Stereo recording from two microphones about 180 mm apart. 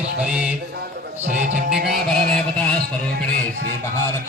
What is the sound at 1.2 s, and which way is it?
Music, 40° right (ahead or behind).